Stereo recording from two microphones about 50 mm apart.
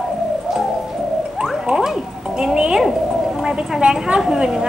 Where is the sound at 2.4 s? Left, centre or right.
Centre.